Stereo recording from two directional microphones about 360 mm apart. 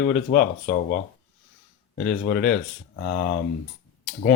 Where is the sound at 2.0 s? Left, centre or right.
Left.